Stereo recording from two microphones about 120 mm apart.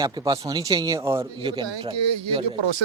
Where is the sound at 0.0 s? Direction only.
35° right (ahead or behind).